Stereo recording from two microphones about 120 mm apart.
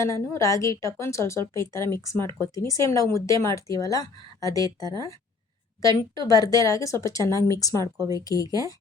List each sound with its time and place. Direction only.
0.0 s a woman's voice: 25° left (ahead or behind)